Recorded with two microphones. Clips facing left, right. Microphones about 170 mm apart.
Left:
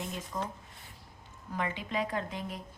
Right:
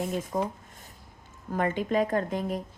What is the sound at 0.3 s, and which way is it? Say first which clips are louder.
A woman's voice: right 7 dB; 45° right (ahead or behind).